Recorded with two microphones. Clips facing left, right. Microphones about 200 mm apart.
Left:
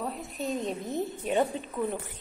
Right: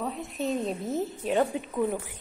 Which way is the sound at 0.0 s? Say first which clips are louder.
Right 3 dB; centre (ahead or behind).